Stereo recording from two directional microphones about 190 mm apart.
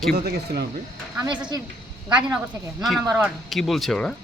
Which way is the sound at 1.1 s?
10° right (ahead or behind).